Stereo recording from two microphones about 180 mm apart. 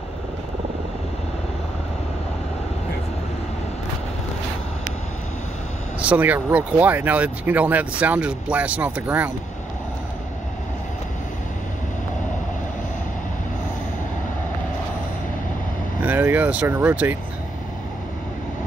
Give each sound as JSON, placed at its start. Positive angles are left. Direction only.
{"t": 5.9, "sound": "speech", "side_deg": -10}
{"t": 16.0, "sound": "speech", "side_deg": -10}